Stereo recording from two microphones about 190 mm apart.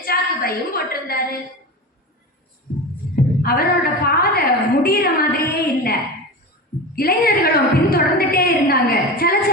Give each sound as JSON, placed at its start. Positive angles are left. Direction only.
{"t": 0.0, "sound": "a woman's voice", "side_deg": 50}
{"t": 3.4, "sound": "a woman's voice", "side_deg": 55}